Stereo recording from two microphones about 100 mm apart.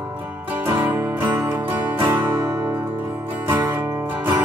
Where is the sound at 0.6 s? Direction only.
20° right (ahead or behind).